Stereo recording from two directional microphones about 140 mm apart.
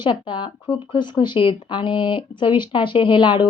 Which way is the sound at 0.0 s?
35° left (ahead or behind).